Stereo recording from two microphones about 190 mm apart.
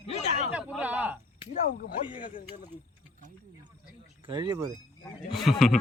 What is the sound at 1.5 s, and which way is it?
Speech, 50° left (ahead or behind).